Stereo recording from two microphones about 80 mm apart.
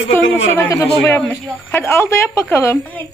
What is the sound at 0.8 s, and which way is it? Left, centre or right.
A woman's voice, left.